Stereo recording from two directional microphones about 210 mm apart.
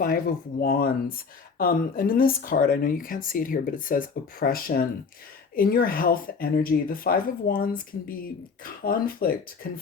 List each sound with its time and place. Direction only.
0.0 s speech: 45° left (ahead or behind)